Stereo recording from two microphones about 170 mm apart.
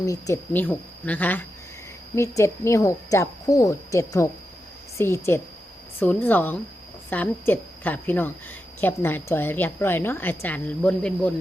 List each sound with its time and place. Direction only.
0.0 s a woman's voice: 20° left (ahead or behind)